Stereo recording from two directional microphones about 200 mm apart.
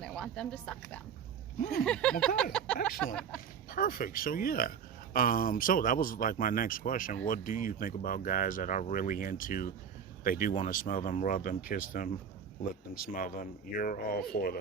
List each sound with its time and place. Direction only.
0.0 s speech: 5° left (ahead or behind)
1.8 s a sound: 5° left (ahead or behind)
3.7 s speech: 45° left (ahead or behind)